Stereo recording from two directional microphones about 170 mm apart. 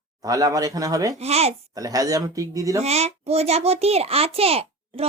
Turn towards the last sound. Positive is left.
turn(degrees=-35)  # may be behind; listen again after turning